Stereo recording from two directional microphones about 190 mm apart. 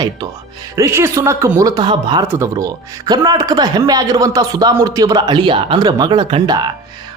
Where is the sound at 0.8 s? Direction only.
15° right (ahead or behind).